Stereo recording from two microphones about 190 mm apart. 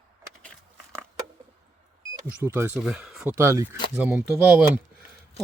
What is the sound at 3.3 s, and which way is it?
Speech, 15° right (ahead or behind).